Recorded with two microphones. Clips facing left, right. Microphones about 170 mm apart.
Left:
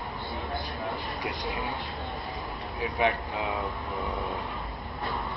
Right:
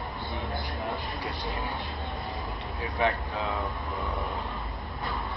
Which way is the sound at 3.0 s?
15° left (ahead or behind).